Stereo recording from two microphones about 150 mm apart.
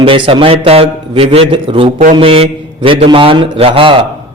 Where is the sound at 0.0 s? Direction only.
35° right (ahead or behind).